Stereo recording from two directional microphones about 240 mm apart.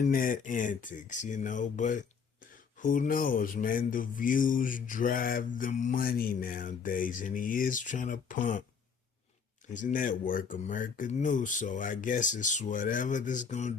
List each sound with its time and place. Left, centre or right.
0.0 s mantra: left
9.6 s mantra: left